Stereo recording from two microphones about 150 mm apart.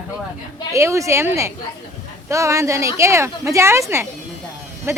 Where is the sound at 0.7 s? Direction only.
20° right (ahead or behind).